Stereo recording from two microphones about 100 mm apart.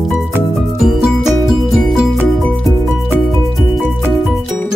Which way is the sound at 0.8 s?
Centre (ahead or behind).